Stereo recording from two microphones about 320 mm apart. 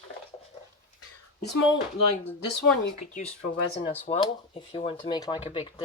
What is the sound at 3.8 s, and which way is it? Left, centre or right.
Speech, centre.